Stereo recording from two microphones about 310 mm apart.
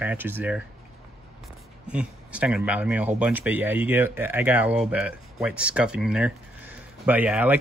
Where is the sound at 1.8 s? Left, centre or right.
Centre.